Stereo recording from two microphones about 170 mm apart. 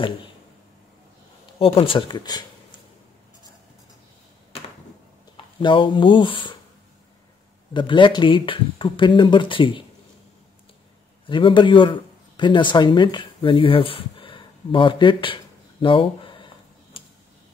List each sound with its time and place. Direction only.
1.6 s speech: 30° left (ahead or behind)
5.6 s speech: 30° left (ahead or behind)
7.7 s speech: 30° left (ahead or behind)
11.2 s speech: 30° left (ahead or behind)